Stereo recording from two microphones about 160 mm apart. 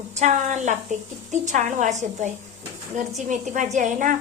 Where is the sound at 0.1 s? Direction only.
45° right (ahead or behind).